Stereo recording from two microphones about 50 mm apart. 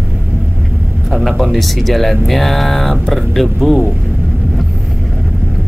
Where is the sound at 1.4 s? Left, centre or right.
Centre.